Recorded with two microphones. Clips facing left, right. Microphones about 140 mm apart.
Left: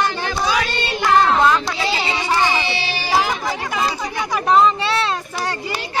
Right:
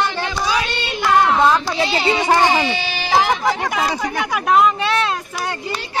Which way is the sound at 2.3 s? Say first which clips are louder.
Right 3 dB; 45° right (ahead or behind).